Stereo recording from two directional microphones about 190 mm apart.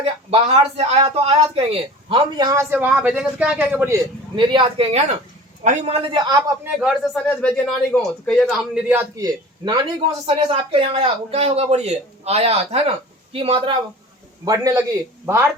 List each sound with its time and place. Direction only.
0.0 s speech: 30° right (ahead or behind); by 3.9 s 10° right (ahead or behind)
4.4 s speech: 25° right (ahead or behind)
6.7 s a man's voice: centre (ahead or behind); by 14.8 s 15° right (ahead or behind)